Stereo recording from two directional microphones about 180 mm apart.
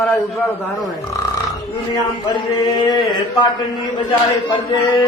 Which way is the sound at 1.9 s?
25° left (ahead or behind).